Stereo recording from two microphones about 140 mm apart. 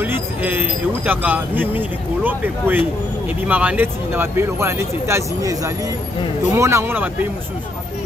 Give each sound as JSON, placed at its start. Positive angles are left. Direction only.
{"t": 0.0, "sound": "speech", "side_deg": -15}